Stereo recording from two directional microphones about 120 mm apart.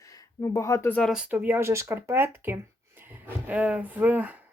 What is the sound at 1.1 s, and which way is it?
Speech, 10° right (ahead or behind).